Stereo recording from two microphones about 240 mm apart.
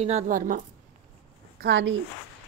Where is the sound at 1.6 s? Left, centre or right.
Right.